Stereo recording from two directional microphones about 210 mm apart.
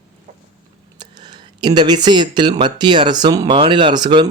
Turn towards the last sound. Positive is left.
turn(degrees=-20)  # may be behind; listen again after turning